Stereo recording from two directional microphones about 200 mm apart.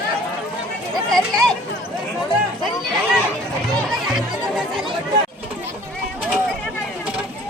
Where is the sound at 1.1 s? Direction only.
5° left (ahead or behind).